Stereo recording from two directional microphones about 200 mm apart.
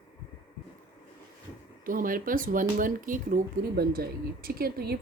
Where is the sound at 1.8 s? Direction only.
45° right (ahead or behind).